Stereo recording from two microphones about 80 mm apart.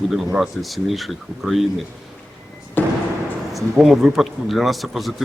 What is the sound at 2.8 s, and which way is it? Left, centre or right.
Music, left.